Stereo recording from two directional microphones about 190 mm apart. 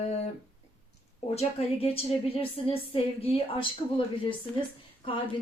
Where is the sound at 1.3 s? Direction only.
30° left (ahead or behind).